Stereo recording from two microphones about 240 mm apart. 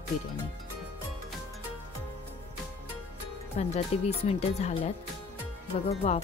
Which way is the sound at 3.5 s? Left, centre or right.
Left.